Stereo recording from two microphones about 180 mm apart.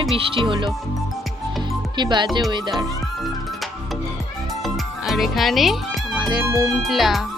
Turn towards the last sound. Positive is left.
turn(degrees=0)  # may be behind; listen again after turning